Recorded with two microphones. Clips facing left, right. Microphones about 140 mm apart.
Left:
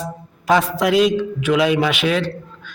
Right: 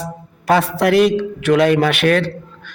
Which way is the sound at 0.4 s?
65° right (ahead or behind).